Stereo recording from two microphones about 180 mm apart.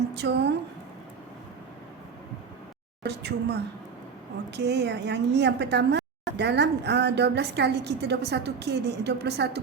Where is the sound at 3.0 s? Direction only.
65° right (ahead or behind).